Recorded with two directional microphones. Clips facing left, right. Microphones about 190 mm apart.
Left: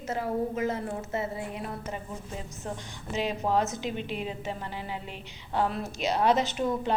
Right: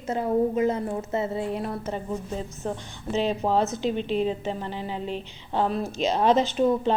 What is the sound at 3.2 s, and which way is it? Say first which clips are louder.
Speech: right 3 dB; 15° left (ahead or behind).